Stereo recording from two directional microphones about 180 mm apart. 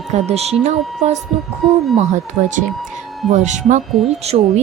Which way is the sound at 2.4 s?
50° right (ahead or behind).